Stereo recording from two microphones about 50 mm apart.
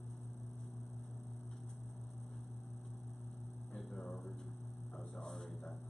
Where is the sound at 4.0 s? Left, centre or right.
Left.